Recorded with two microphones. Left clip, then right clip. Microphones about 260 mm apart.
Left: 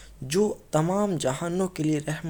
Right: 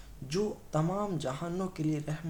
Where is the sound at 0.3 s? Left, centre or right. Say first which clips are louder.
Left 9 dB; left.